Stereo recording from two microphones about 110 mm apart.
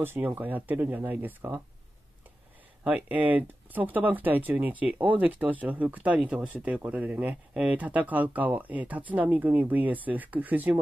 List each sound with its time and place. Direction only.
0.0 s speech: 20° right (ahead or behind)
2.8 s speech: 10° right (ahead or behind)